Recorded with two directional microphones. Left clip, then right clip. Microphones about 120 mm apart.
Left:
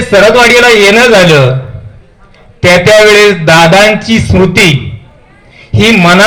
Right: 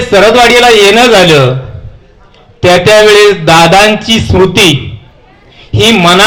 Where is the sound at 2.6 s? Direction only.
45° right (ahead or behind).